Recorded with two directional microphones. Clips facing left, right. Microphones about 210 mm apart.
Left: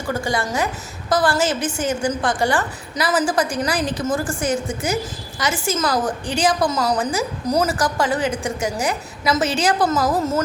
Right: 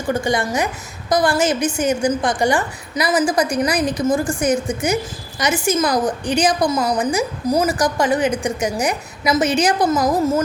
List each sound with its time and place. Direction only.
0.1 s a woman's voice: 20° right (ahead or behind)